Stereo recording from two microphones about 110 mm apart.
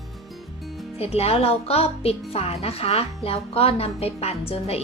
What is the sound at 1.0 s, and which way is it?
A woman's voice, 65° left (ahead or behind).